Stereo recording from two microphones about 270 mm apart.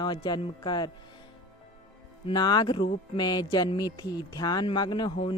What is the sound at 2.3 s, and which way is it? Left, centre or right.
Speech, centre.